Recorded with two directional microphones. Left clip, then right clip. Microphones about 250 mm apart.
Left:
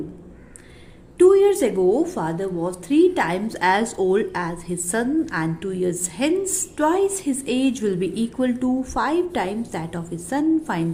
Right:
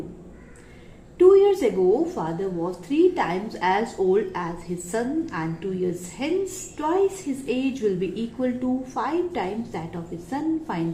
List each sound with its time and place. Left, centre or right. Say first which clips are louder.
1.2 s a woman's voice: left 1 dB; left